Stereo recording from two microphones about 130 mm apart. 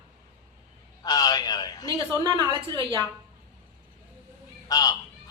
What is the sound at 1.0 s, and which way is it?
Speech, 30° left (ahead or behind).